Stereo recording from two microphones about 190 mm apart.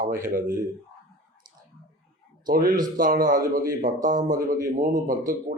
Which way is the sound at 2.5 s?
45° right (ahead or behind).